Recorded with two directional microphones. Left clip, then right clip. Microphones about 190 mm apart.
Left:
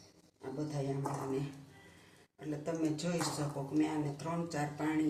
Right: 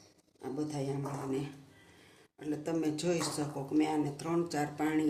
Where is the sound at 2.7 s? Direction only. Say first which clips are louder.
Right 3 dB; 55° right (ahead or behind).